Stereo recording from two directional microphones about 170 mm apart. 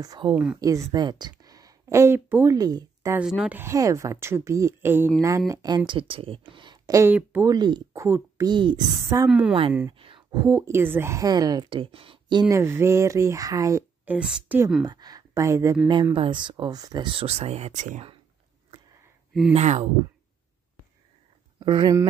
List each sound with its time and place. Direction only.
0.0 s speech: 25° right (ahead or behind)
3.3 s a woman's voice: 5° right (ahead or behind)
7.5 s speech: 25° right (ahead or behind)
9.3 s a woman's voice: 5° right (ahead or behind)
9.8 s a woman's voice: 30° right (ahead or behind); by 14.6 s 5° right (ahead or behind)
14.9 s speech: 25° right (ahead or behind); by 18.0 s 45° right (ahead or behind)
19.5 s speech: 45° right (ahead or behind)
21.5 s speech: 25° right (ahead or behind)